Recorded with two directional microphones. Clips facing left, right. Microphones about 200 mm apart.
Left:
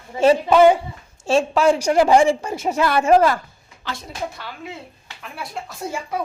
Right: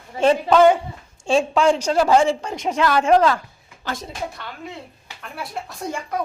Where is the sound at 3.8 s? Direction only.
45° right (ahead or behind).